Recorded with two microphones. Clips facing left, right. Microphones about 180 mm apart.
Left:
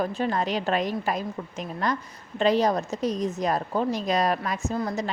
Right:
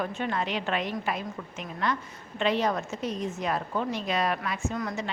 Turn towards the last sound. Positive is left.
turn(degrees=35)  # may be behind; listen again after turning